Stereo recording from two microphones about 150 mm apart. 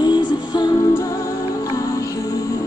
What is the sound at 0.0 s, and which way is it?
Music, 30° left (ahead or behind).